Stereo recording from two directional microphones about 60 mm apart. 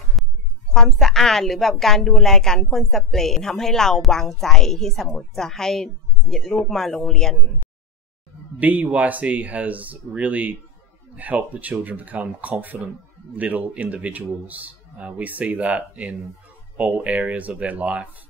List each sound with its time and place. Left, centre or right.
0.2 s a sound: centre
0.7 s a woman's voice: centre
8.5 s a man's voice: right